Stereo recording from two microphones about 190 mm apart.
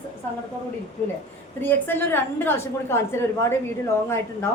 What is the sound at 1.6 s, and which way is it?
A woman's voice, 10° left (ahead or behind).